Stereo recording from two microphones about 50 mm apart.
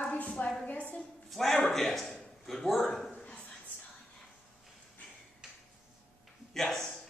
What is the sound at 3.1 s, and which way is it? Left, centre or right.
Dog, left.